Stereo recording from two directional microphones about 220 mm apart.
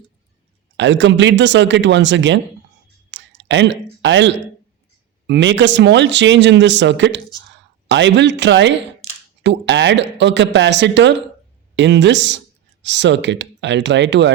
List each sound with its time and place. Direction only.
0.8 s speech: 55° right (ahead or behind)
3.1 s a sound: 55° right (ahead or behind)
5.2 s speech: 55° right (ahead or behind)